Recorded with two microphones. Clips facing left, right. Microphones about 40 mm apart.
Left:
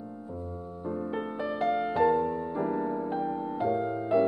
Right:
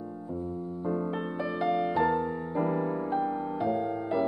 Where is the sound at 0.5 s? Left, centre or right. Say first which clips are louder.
Right 4 dB; centre.